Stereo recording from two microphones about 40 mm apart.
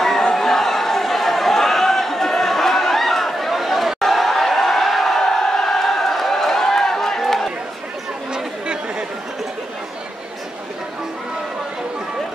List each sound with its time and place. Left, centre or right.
0.2 s chatter: centre
5.2 s a sound: centre
8.3 s chatter: right